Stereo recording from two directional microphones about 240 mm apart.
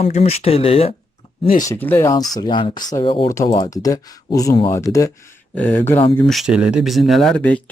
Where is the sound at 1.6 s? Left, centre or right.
Centre.